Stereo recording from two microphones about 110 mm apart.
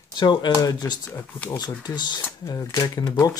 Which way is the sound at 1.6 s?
35° left (ahead or behind).